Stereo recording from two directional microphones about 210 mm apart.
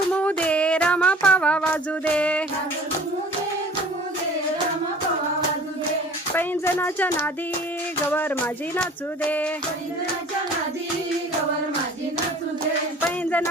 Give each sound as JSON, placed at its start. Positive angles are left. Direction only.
{"t": 0.1, "sound": "music", "side_deg": 5}
{"t": 6.3, "sound": "speech", "side_deg": 10}
{"t": 13.1, "sound": "music", "side_deg": 5}